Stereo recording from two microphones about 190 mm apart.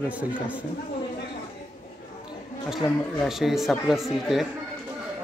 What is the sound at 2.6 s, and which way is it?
Speech, centre (ahead or behind).